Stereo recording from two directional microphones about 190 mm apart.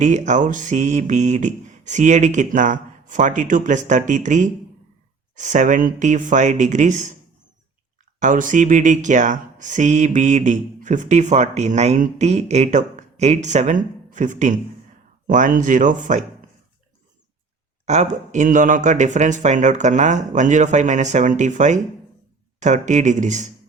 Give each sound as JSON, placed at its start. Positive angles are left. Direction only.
{"t": 0.0, "sound": "speech", "side_deg": -40}
{"t": 8.2, "sound": "speech", "side_deg": -45}
{"t": 17.8, "sound": "speech", "side_deg": -40}